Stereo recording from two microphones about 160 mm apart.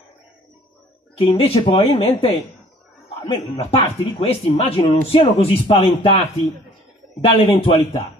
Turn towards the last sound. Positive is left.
turn(degrees=35)  # may be behind; listen again after turning